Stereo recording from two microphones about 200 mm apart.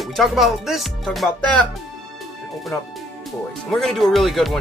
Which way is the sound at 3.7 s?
Centre (ahead or behind).